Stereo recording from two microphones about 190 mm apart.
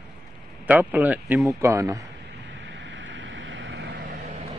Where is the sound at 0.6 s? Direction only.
10° right (ahead or behind).